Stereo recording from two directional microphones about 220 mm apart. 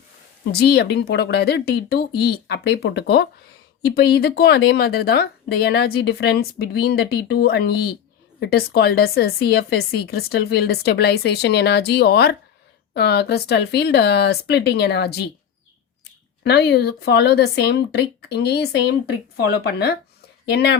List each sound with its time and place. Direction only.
0.5 s speech: 45° left (ahead or behind)
16.4 s speech: 50° left (ahead or behind)